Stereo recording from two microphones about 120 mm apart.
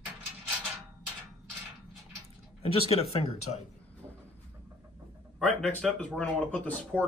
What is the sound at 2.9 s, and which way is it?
Speech, 60° left (ahead or behind).